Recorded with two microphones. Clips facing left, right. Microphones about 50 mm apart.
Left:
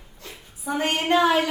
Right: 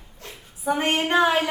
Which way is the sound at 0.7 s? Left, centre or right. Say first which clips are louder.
Even; right.